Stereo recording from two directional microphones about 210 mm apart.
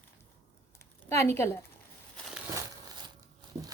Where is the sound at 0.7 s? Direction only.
15° left (ahead or behind).